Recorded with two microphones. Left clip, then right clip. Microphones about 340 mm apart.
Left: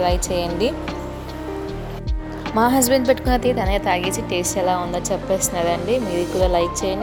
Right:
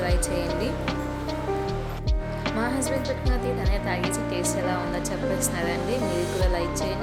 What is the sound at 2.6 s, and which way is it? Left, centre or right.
A woman's voice, left.